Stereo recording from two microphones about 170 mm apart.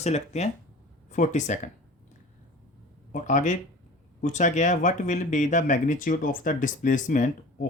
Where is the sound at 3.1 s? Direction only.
50° left (ahead or behind).